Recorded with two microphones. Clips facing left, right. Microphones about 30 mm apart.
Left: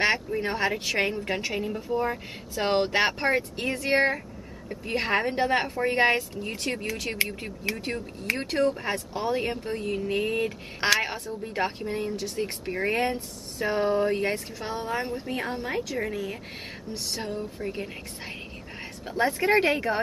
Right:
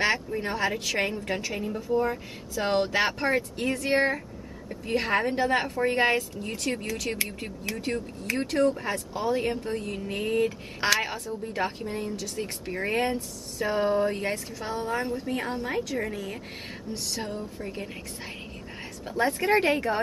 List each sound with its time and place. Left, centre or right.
0.5 s speech: centre
8.6 s speech: centre
12.7 s a woman's voice: centre
19.0 s speech: centre